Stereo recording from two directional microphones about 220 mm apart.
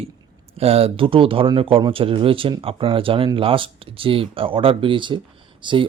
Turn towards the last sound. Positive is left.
turn(degrees=-25)  # may be behind; listen again after turning